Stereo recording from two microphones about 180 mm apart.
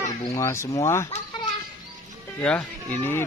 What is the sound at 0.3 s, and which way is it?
Speech, 15° left (ahead or behind).